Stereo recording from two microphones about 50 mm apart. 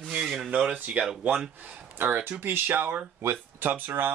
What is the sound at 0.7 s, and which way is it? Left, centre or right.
Speech, right.